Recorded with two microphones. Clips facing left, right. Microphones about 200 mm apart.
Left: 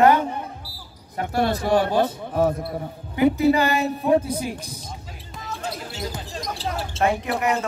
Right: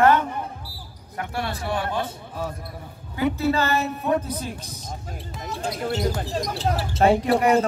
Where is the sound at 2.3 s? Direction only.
60° left (ahead or behind).